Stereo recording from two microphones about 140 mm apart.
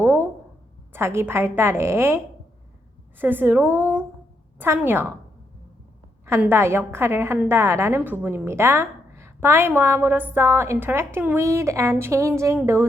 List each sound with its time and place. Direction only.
0.0 s a sound: 15° right (ahead or behind)
0.9 s a woman's voice: 15° right (ahead or behind)
6.2 s a woman's voice: 15° right (ahead or behind)